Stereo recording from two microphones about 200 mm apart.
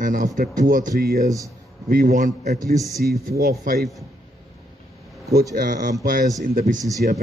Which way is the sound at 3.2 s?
50° right (ahead or behind).